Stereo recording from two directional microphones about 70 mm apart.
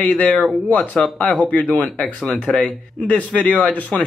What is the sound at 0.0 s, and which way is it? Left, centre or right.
Speech, centre.